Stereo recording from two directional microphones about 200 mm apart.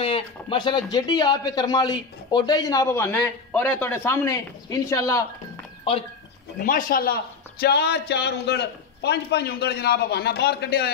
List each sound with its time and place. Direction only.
0.0 s speech: 25° left (ahead or behind)
6.6 s a man's voice: 45° left (ahead or behind)